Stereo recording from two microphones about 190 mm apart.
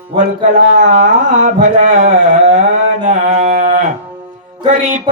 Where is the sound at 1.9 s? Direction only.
45° right (ahead or behind).